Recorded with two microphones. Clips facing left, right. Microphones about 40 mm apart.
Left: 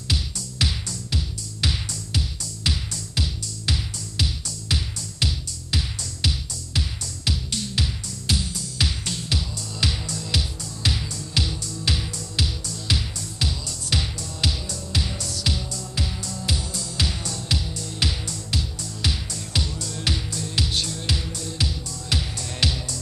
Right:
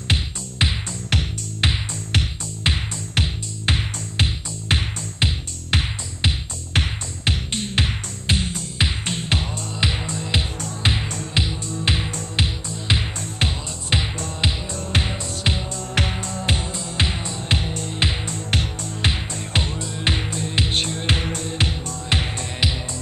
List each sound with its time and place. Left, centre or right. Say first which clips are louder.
0.1 s music: right 4 dB; right
15.9 s music: right 8 dB; right